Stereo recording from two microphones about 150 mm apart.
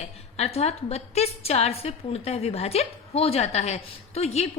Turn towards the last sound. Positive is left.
turn(degrees=45)  # may be behind; listen again after turning